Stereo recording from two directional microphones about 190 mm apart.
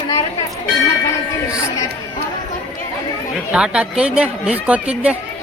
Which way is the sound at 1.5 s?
15° left (ahead or behind).